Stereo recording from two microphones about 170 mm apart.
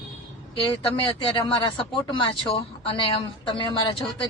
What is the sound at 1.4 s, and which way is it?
Speech, 25° left (ahead or behind).